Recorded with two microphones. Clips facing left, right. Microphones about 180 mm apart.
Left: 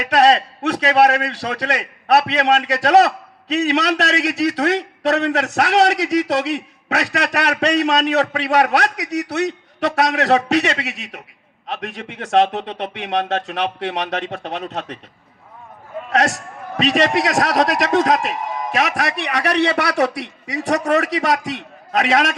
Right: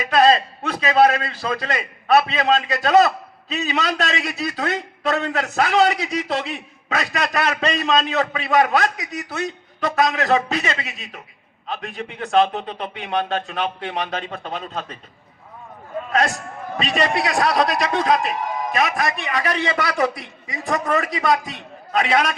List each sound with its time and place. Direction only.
0.0 s a man's voice: 75° left (ahead or behind)
16.7 s a man's voice: 90° left